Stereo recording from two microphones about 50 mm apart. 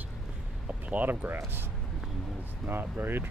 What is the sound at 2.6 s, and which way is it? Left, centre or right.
Speech, right.